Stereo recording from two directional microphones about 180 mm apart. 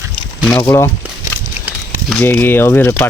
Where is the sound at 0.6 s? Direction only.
15° left (ahead or behind).